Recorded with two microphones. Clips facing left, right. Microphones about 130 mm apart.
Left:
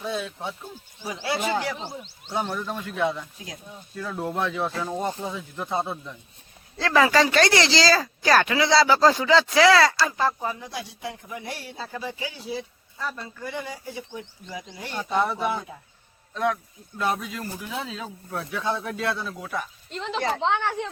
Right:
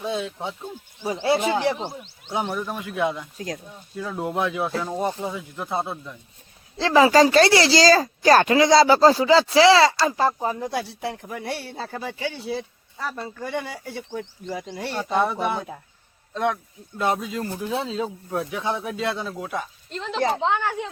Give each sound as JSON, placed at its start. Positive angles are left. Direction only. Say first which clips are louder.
{"t": 0.0, "sound": "speech", "louder": "right 2 dB", "side_deg": -20}
{"t": 2.3, "sound": "speech", "louder": "right 2 dB", "side_deg": -15}
{"t": 6.7, "sound": "speech", "louder": "right 4 dB", "side_deg": -25}
{"t": 10.5, "sound": "speech", "louder": "right 7 dB", "side_deg": -50}
{"t": 13.6, "sound": "speech", "louder": "right 2 dB", "side_deg": -70}
{"t": 14.9, "sound": "speech", "louder": "right 2 dB", "side_deg": -15}
{"t": 19.9, "sound": "speech", "louder": "right 3 dB", "side_deg": 0}